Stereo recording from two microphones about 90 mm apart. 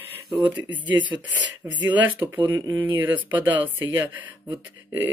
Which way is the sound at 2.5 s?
50° right (ahead or behind).